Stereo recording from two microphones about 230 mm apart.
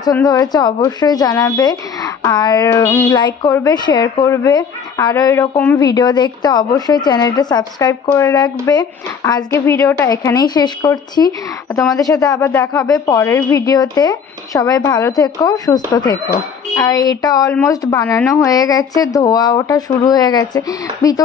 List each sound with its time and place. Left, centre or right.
0.0 s speech: centre